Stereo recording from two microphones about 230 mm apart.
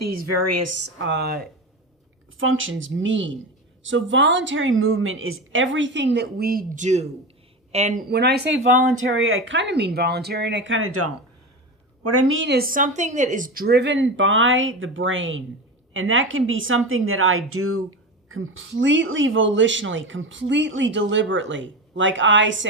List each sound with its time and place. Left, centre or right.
0.0 s speech: right
0.9 s a woman's voice: right
2.4 s a woman's voice: right
8.1 s a woman's voice: right